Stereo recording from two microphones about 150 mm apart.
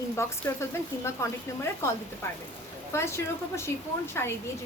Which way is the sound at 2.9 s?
15° left (ahead or behind).